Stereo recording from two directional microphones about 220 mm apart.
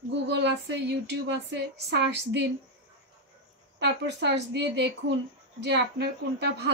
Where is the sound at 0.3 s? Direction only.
50° right (ahead or behind).